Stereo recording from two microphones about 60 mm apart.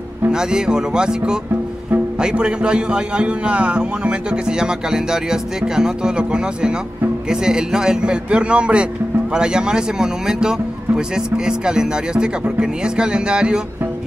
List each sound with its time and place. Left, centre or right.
0.3 s a man's voice: centre